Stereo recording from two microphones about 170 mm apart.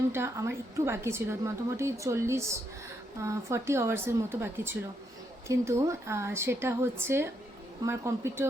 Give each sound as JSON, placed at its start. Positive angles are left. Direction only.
{"t": 0.1, "sound": "a woman's voice", "side_deg": -15}